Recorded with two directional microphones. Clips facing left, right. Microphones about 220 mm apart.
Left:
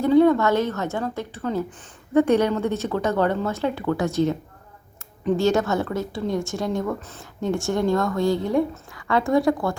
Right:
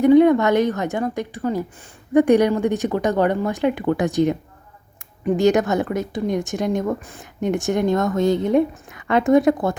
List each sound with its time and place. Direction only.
0.0 s a woman's voice: 15° right (ahead or behind)